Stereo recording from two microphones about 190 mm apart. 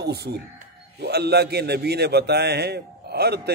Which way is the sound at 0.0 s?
60° right (ahead or behind).